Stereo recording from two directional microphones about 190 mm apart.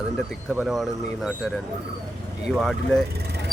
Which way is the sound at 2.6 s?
Centre (ahead or behind).